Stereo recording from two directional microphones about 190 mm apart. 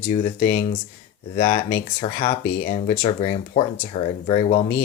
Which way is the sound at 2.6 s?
45° left (ahead or behind).